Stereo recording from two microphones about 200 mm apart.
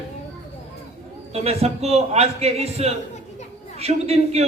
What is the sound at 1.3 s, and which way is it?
Speech, 30° right (ahead or behind).